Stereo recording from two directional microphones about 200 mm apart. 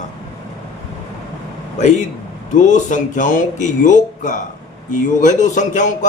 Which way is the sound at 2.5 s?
40° left (ahead or behind).